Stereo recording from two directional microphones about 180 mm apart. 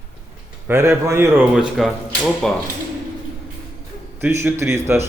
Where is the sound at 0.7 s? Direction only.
15° right (ahead or behind).